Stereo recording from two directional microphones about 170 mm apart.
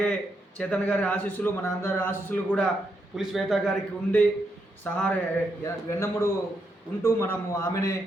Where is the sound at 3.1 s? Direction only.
Centre (ahead or behind).